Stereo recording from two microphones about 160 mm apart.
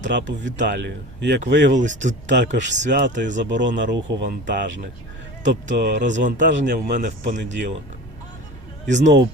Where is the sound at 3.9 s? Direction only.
90° right.